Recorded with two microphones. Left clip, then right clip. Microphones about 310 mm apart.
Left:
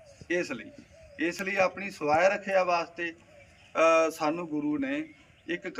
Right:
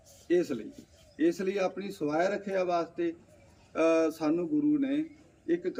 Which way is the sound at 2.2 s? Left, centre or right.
Left.